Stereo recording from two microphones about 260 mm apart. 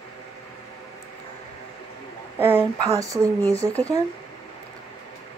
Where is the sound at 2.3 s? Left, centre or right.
Centre.